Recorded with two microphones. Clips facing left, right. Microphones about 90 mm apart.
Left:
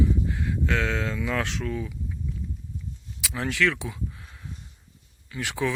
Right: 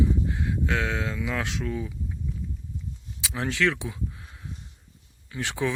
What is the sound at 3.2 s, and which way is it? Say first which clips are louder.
Speech: even; 25° right (ahead or behind).